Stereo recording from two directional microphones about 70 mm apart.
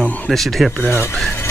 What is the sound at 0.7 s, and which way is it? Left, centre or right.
Speech, left.